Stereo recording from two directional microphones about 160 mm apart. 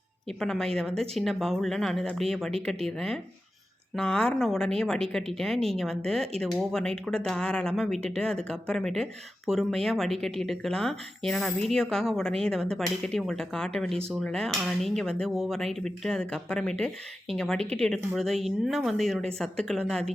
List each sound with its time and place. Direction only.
0.3 s dishes: 5° left (ahead or behind)